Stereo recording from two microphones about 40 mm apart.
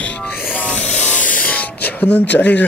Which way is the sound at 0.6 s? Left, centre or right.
Left.